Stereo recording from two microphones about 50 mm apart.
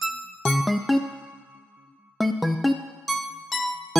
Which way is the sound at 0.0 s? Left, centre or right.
Centre.